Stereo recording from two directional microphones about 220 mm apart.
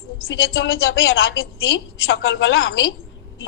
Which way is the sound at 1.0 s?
60° left (ahead or behind).